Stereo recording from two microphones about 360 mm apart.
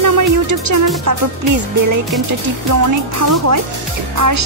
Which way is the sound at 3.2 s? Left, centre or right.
Right.